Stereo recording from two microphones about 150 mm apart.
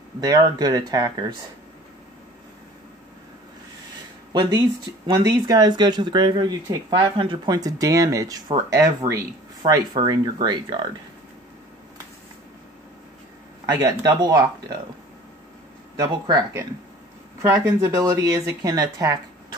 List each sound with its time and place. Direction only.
0.2 s speech: 25° right (ahead or behind)
4.3 s speech: 30° right (ahead or behind)
13.7 s speech: 25° right (ahead or behind)
16.0 s speech: 25° right (ahead or behind)
17.4 s speech: 15° right (ahead or behind)